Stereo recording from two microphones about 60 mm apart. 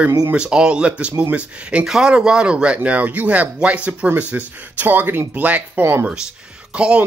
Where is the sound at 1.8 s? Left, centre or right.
Centre.